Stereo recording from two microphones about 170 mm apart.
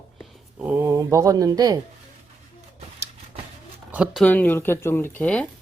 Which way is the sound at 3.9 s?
5° right (ahead or behind).